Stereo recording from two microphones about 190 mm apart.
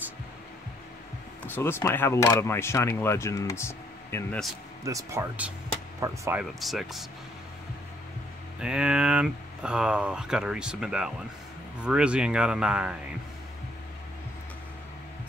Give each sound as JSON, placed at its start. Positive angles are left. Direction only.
{"t": 1.4, "sound": "speech", "side_deg": 10}
{"t": 4.8, "sound": "speech", "side_deg": -15}
{"t": 6.6, "sound": "speech", "side_deg": 0}
{"t": 8.5, "sound": "speech", "side_deg": -5}